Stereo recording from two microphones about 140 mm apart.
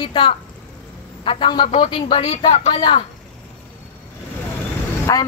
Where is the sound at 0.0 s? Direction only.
40° left (ahead or behind).